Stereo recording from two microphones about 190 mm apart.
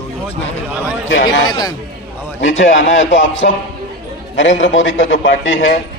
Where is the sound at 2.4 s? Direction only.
80° left.